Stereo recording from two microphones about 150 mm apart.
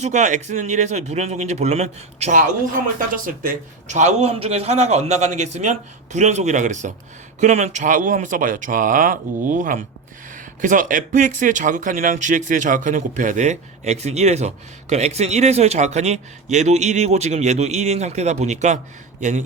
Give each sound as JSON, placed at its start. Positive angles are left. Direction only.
{"t": 0.0, "sound": "speech", "side_deg": -50}
{"t": 3.2, "sound": "speech", "side_deg": -65}